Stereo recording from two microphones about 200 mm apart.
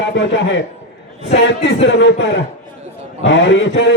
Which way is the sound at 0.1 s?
65° left (ahead or behind).